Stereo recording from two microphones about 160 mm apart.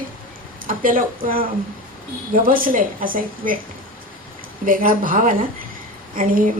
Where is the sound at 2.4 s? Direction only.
60° right (ahead or behind).